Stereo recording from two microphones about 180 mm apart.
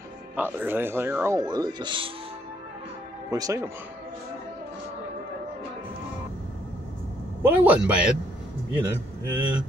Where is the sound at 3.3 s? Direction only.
20° right (ahead or behind).